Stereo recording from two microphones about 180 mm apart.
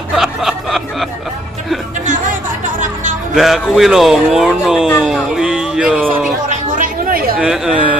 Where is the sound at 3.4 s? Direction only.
Centre (ahead or behind).